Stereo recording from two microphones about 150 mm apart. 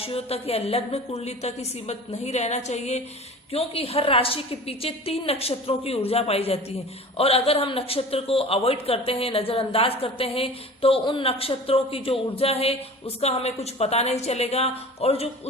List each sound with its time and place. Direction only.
0.0 s a woman's voice: 40° left (ahead or behind)